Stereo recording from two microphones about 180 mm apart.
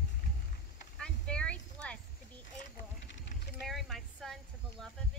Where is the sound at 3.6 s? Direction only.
Centre (ahead or behind).